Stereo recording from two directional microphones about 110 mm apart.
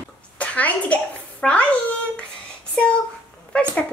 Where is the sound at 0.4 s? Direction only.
15° left (ahead or behind).